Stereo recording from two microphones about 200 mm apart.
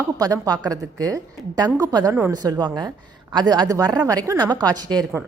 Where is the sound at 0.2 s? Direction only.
20° right (ahead or behind).